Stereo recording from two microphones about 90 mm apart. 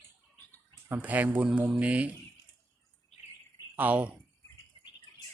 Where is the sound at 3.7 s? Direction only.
20° right (ahead or behind).